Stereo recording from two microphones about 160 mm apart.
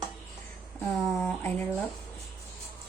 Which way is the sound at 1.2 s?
10° left (ahead or behind).